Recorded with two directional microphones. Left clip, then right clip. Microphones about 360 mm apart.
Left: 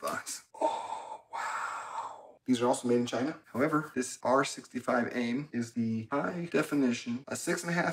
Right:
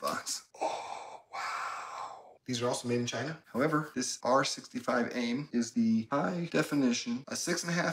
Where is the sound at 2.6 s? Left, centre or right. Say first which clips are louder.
Left 3 dB; centre.